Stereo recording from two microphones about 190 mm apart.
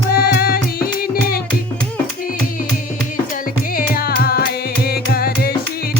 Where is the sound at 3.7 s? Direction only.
50° left (ahead or behind).